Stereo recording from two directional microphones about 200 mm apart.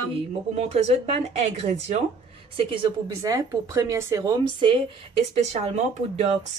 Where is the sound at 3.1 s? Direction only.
15° right (ahead or behind).